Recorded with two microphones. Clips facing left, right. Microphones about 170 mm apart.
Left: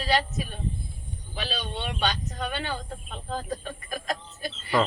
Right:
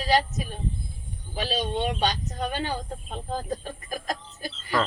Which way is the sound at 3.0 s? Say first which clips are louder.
Right 1 dB; 25° right (ahead or behind).